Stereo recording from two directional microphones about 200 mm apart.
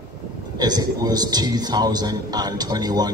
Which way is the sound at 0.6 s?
20° right (ahead or behind).